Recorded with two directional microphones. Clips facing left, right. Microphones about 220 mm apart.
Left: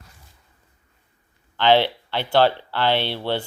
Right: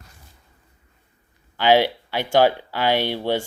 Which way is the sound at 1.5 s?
10° right (ahead or behind).